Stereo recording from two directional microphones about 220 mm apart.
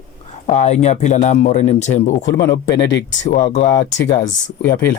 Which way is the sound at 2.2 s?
50° left (ahead or behind).